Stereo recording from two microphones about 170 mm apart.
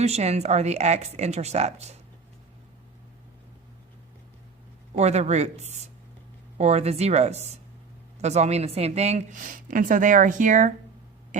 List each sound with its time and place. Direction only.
0.0 s speech: 40° right (ahead or behind)
4.9 s a woman's voice: 40° right (ahead or behind)